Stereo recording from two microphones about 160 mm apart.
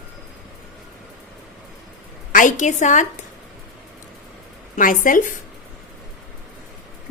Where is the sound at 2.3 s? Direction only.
50° left (ahead or behind).